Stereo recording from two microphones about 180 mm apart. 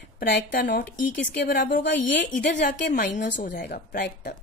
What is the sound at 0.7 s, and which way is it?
Speech, 75° left (ahead or behind).